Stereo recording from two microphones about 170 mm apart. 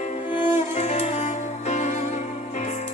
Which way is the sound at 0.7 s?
40° left (ahead or behind).